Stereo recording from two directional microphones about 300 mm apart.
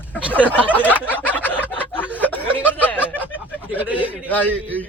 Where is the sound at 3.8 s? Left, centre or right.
Centre.